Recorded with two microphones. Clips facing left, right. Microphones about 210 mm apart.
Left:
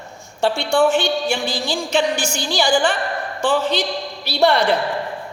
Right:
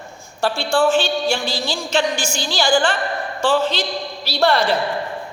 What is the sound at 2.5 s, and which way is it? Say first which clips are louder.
A woman's voice: even; 15° left (ahead or behind).